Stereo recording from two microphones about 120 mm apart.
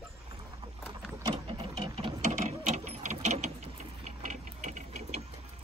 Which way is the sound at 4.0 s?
80° right.